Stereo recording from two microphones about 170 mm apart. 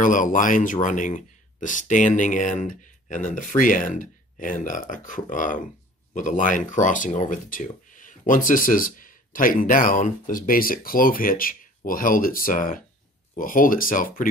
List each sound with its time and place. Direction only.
0.0 s speech: 50° left (ahead or behind)